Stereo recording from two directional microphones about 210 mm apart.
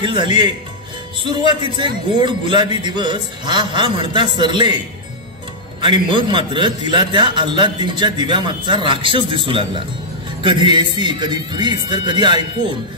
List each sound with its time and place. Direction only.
0.0 s a man's voice: 20° right (ahead or behind)
5.9 s a man's voice: 20° right (ahead or behind)